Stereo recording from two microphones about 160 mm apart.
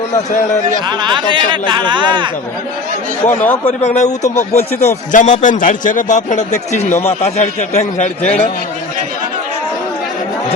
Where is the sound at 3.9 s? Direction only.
45° left (ahead or behind).